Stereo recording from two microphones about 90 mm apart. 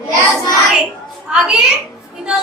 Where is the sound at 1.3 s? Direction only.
10° right (ahead or behind).